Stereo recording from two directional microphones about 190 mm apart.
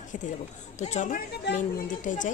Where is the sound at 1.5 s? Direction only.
40° left (ahead or behind).